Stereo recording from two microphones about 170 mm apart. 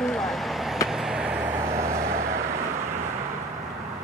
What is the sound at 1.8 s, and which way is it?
Vehicle, 15° right (ahead or behind).